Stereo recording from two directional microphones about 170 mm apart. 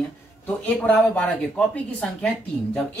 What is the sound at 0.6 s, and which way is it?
Speech, 10° left (ahead or behind).